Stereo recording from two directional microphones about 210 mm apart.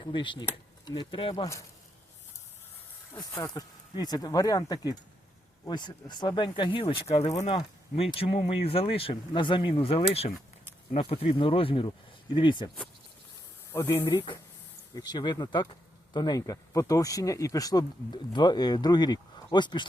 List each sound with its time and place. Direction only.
0.0 s speech: 25° left (ahead or behind)
3.2 s speech: 15° left (ahead or behind)
13.7 s speech: 10° left (ahead or behind)